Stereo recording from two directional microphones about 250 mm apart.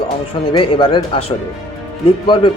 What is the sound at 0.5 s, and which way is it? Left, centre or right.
Speech, left.